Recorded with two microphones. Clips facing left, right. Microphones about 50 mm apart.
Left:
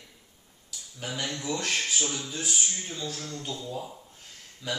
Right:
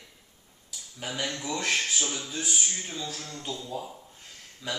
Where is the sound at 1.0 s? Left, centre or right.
Centre.